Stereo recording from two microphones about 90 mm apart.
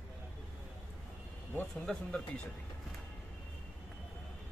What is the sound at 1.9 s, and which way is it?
Speech, 10° left (ahead or behind).